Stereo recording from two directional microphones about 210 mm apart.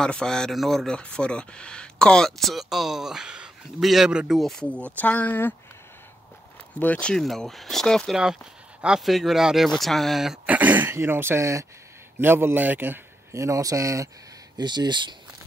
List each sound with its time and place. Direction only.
0.0 s speech: 5° left (ahead or behind)
6.8 s a man's voice: 5° left (ahead or behind); by 15.1 s 20° right (ahead or behind)